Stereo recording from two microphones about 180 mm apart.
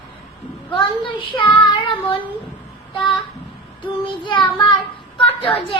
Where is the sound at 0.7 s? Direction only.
30° left (ahead or behind).